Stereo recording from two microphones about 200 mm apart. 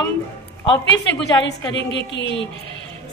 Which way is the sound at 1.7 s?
60° left (ahead or behind).